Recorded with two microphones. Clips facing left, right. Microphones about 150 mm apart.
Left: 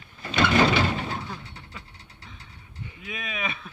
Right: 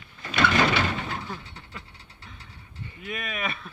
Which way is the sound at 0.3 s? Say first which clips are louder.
Left 2 dB; 20° left (ahead or behind).